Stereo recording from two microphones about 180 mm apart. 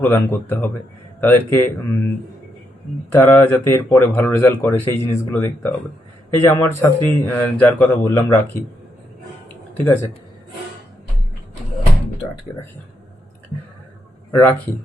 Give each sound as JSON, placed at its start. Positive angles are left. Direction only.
{"t": 0.0, "sound": "speech", "side_deg": 10}
{"t": 3.1, "sound": "speech", "side_deg": 15}
{"t": 9.7, "sound": "speech", "side_deg": 10}
{"t": 14.3, "sound": "speech", "side_deg": 15}